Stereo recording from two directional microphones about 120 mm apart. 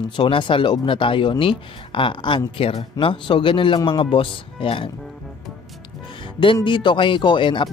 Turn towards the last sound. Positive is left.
turn(degrees=40)  # may be behind; listen again after turning